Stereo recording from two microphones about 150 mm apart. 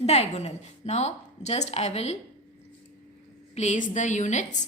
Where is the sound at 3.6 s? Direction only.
55° left (ahead or behind).